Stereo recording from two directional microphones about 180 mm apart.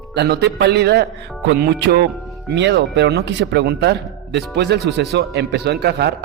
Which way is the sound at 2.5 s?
75° right (ahead or behind).